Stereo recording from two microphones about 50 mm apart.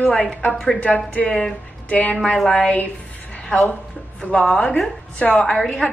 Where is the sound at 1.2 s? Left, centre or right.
Centre.